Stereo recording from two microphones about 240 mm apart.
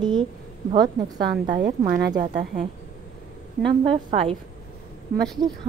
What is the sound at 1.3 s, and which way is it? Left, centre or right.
Speech, right.